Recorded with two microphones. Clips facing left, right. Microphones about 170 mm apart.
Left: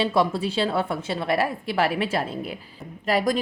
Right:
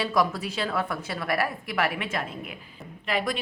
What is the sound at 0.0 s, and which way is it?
A woman's voice, 30° left (ahead or behind).